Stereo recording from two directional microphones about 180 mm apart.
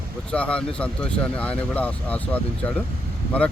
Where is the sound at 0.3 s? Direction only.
5° left (ahead or behind).